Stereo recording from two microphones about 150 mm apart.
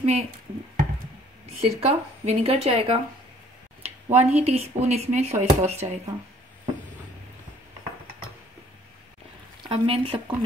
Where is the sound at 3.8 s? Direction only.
45° right (ahead or behind).